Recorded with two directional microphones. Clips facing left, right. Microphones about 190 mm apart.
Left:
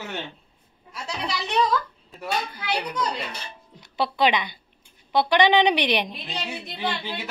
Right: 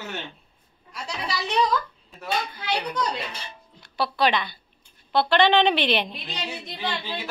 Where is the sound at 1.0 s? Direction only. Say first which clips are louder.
Even; centre (ahead or behind).